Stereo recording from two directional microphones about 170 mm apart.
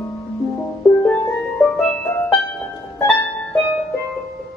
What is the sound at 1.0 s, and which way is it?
Music, 10° left (ahead or behind).